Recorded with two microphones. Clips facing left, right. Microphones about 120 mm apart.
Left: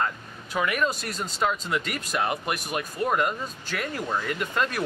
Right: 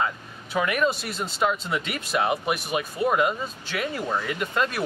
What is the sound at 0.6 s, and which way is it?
Speech, 5° right (ahead or behind).